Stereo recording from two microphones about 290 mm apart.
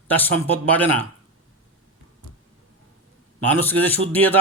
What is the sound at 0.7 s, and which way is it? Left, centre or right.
Speech, centre.